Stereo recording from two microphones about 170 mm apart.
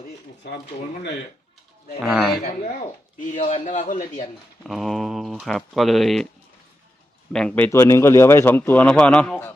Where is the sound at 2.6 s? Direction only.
50° left (ahead or behind).